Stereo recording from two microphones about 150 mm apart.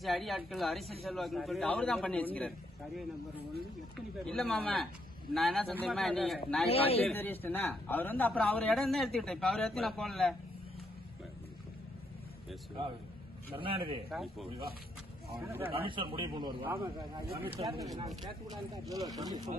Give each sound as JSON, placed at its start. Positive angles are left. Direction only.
{"t": 0.0, "sound": "a man's voice", "side_deg": 0}
{"t": 4.3, "sound": "a man's voice", "side_deg": 0}
{"t": 6.7, "sound": "speech", "side_deg": 40}
{"t": 7.1, "sound": "a man's voice", "side_deg": 15}
{"t": 13.5, "sound": "a man's voice", "side_deg": -35}
{"t": 14.1, "sound": "a man's voice", "side_deg": 0}
{"t": 15.4, "sound": "speech", "side_deg": -15}
{"t": 15.7, "sound": "a man's voice", "side_deg": -35}
{"t": 17.6, "sound": "a man's voice", "side_deg": -40}
{"t": 18.2, "sound": "speech", "side_deg": -30}